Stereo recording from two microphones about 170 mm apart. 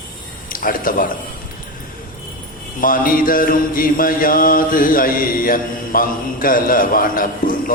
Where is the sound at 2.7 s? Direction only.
55° left (ahead or behind).